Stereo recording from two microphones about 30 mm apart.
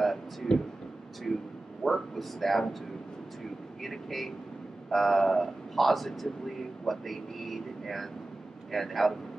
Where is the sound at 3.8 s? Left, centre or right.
Centre.